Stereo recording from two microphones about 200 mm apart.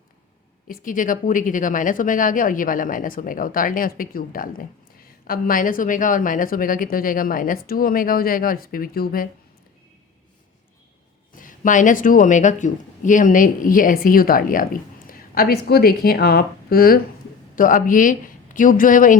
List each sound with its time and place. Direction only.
0.7 s speech: 40° left (ahead or behind)
11.3 s speech: 40° left (ahead or behind)